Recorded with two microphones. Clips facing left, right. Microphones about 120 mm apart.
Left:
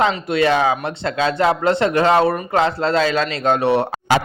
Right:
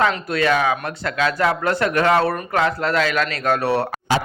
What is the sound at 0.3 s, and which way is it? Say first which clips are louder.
Speech: left 3 dB; 25° left (ahead or behind).